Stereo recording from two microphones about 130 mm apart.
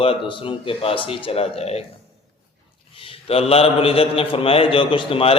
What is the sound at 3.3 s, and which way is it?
A man's voice, 50° left (ahead or behind).